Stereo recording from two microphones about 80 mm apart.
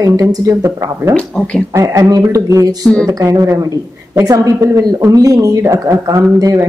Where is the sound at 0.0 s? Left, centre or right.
Right.